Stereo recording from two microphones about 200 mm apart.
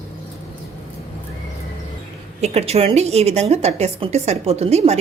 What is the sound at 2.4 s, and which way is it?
A woman's voice, 30° right (ahead or behind).